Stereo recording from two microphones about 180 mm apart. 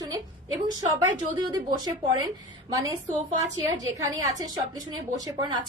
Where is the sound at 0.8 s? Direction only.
25° right (ahead or behind).